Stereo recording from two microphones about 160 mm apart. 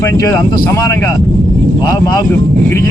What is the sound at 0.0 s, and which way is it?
A man's voice, 20° left (ahead or behind).